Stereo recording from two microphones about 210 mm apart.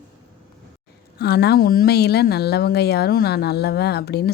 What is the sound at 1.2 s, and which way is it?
A woman's voice, 50° left (ahead or behind).